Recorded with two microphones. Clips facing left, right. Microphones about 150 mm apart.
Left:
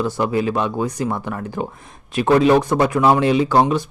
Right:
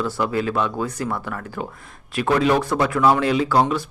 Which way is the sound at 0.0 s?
20° left (ahead or behind).